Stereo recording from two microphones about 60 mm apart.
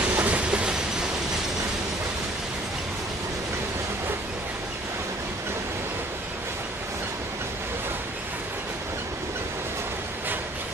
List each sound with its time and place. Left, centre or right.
0.0 s train: right